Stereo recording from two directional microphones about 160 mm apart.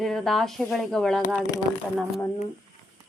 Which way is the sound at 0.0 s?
Centre (ahead or behind).